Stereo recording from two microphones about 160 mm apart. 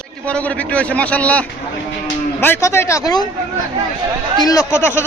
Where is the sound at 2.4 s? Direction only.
15° left (ahead or behind).